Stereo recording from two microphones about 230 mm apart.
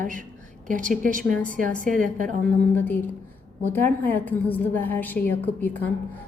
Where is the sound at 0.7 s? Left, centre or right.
Right.